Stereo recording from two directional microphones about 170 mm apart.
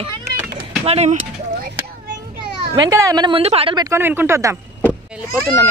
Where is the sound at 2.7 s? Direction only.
20° right (ahead or behind).